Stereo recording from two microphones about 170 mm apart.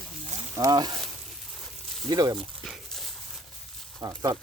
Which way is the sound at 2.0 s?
25° right (ahead or behind).